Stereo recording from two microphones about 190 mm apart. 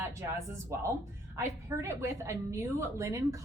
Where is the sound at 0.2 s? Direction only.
15° right (ahead or behind).